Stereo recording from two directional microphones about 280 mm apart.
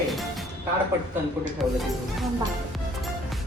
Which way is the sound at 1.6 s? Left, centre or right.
Centre.